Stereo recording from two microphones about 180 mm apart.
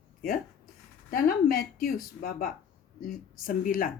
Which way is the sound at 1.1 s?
55° left (ahead or behind).